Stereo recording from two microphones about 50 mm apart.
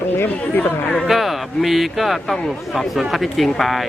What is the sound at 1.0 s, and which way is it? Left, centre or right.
Speech, centre.